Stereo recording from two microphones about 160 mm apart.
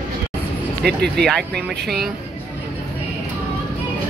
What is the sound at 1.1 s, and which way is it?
Speech, 5° left (ahead or behind).